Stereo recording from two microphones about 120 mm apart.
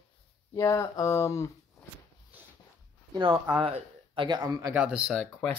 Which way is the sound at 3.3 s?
15° right (ahead or behind).